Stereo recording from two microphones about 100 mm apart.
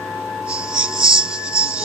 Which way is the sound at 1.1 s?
10° right (ahead or behind).